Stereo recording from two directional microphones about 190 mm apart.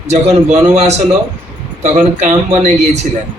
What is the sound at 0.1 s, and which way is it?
A man's voice, 35° right (ahead or behind).